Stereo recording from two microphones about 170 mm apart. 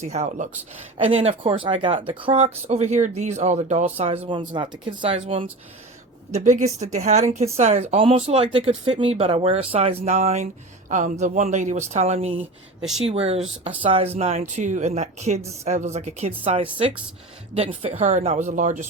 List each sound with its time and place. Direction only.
0.0 s speech: 40° right (ahead or behind)
6.3 s speech: 45° right (ahead or behind)